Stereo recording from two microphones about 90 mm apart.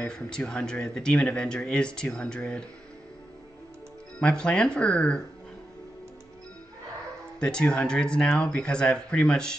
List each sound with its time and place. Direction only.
0.0 s speech: 10° left (ahead or behind)
4.2 s speech: 10° left (ahead or behind)
7.3 s speech: 10° left (ahead or behind)